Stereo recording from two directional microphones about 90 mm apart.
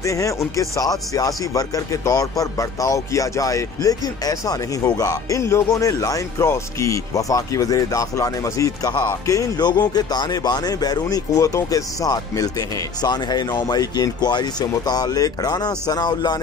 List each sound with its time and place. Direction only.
0.0 s speech: 35° left (ahead or behind); by 16.3 s 50° left (ahead or behind)